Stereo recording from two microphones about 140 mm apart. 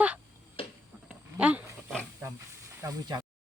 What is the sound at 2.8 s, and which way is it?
Speech, 25° right (ahead or behind).